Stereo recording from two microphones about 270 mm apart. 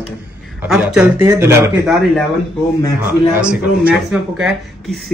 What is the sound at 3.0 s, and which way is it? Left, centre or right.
A man's voice, centre.